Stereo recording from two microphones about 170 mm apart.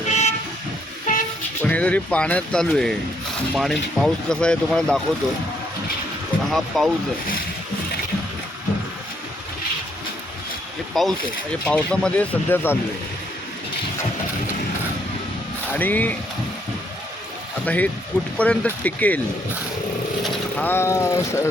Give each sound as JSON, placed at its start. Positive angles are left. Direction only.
{"t": 0.1, "sound": "vehicle", "side_deg": 40}
{"t": 1.6, "sound": "speech", "side_deg": 10}
{"t": 6.5, "sound": "speech", "side_deg": 0}
{"t": 11.0, "sound": "speech", "side_deg": 0}
{"t": 15.7, "sound": "speech", "side_deg": 10}
{"t": 17.7, "sound": "speech", "side_deg": 10}
{"t": 20.2, "sound": "speech", "side_deg": 10}